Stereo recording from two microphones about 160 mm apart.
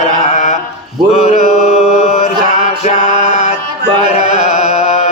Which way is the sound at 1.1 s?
45° left (ahead or behind).